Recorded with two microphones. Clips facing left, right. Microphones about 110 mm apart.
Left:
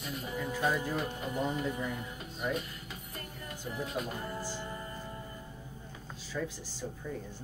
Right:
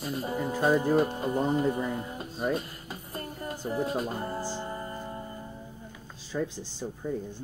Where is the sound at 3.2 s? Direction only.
35° right (ahead or behind).